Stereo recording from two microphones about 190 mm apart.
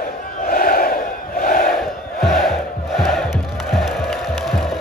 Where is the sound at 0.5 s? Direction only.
50° left (ahead or behind).